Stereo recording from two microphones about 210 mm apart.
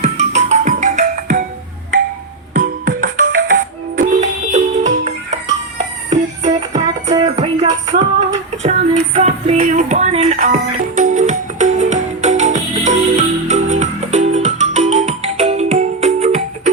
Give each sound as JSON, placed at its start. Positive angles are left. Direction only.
{"t": 0.0, "sound": "music", "side_deg": -30}
{"t": 2.5, "sound": "music", "side_deg": -40}